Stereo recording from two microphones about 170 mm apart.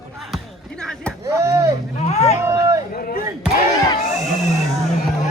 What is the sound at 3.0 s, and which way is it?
Speech, 55° left (ahead or behind).